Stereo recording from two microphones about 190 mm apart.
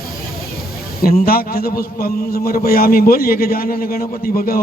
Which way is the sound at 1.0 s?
50° left (ahead or behind).